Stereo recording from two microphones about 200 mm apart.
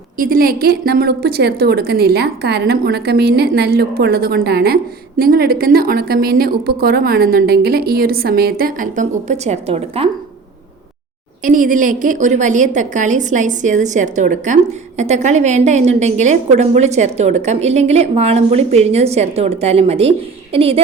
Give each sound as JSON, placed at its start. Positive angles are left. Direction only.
{"t": 0.2, "sound": "a woman's voice", "side_deg": -45}
{"t": 11.4, "sound": "a woman's voice", "side_deg": -40}